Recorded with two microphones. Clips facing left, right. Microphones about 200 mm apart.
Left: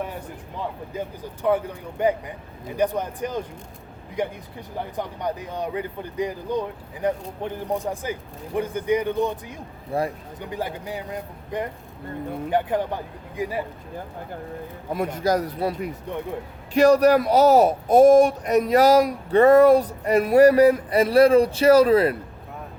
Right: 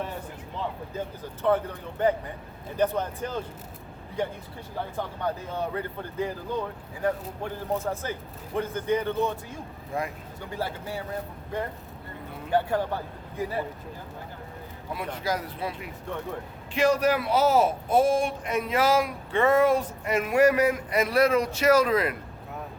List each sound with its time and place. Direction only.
0.9 s speech: 10° left (ahead or behind)
9.9 s a man's voice: 35° left (ahead or behind)
10.4 s speech: 15° left (ahead or behind)
14.9 s a man's voice: 45° left (ahead or behind)